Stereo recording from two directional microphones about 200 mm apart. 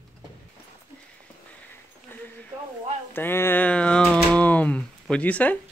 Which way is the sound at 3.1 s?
10° left (ahead or behind).